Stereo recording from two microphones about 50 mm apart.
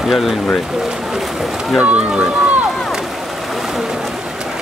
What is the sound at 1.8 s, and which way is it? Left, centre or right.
Speech, right.